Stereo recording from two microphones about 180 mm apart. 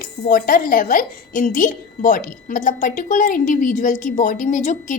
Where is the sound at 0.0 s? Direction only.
50° left (ahead or behind).